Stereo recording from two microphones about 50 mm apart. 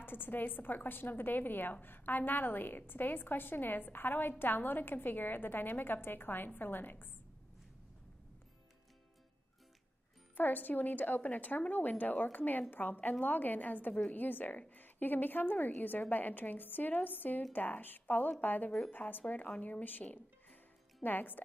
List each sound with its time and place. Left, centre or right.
0.0 s a woman's voice: left
10.3 s a woman's voice: left